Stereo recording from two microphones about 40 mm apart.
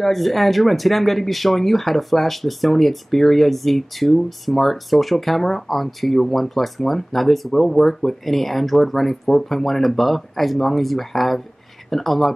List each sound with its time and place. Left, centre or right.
0.0 s speech: centre